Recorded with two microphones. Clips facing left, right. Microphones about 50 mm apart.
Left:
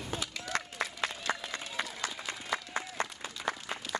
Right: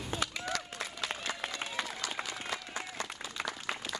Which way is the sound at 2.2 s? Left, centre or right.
Left.